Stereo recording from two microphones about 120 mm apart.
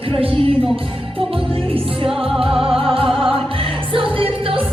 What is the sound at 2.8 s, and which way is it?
Music, 50° right (ahead or behind).